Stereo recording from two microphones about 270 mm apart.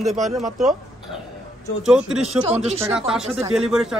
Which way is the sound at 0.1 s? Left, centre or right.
Centre.